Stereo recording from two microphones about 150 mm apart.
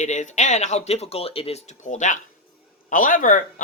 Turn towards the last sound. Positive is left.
turn(degrees=60)  # may be behind; listen again after turning